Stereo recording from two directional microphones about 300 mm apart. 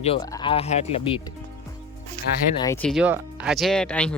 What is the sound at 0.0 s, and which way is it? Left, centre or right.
Speech, centre.